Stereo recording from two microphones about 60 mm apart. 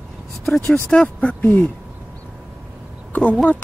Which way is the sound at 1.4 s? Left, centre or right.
Left.